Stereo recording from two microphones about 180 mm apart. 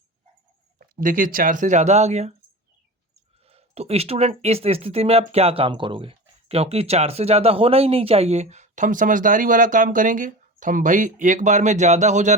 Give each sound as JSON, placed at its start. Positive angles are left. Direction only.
{"t": 0.8, "sound": "speech", "side_deg": -50}
{"t": 3.4, "sound": "speech", "side_deg": -35}